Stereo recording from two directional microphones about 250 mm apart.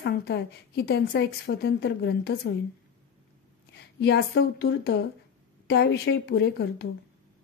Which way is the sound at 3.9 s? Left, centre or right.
Left.